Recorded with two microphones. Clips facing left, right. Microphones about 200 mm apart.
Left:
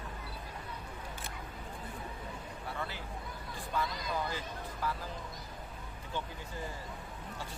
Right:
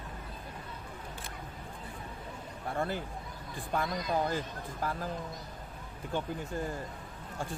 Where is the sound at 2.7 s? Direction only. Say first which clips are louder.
Right 9 dB; 45° right (ahead or behind).